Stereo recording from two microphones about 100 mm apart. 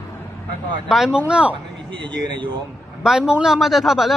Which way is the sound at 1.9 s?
55° right (ahead or behind).